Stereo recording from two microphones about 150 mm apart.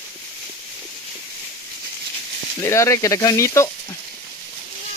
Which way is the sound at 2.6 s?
20° left (ahead or behind).